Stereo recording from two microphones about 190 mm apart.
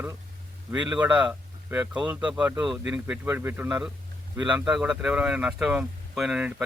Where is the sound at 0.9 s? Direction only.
10° right (ahead or behind).